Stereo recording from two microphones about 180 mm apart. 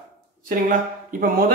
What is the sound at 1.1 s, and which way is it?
Speech, 50° right (ahead or behind).